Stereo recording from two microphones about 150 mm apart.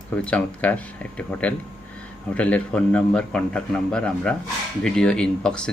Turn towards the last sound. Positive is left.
turn(degrees=5)  # may be behind; listen again after turning